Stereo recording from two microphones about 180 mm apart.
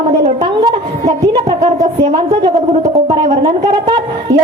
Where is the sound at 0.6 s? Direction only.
25° right (ahead or behind).